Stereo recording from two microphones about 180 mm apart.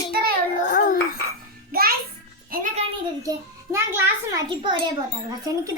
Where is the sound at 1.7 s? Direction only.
55° right (ahead or behind).